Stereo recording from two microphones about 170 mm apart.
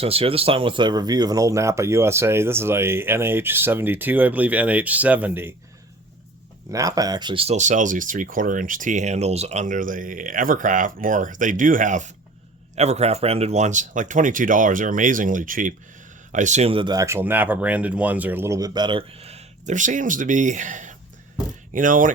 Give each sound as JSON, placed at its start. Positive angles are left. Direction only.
{"t": 0.0, "sound": "speech", "side_deg": -35}
{"t": 6.7, "sound": "speech", "side_deg": -20}